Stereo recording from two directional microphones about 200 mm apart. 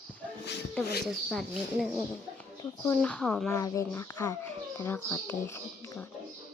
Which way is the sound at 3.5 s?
15° left (ahead or behind).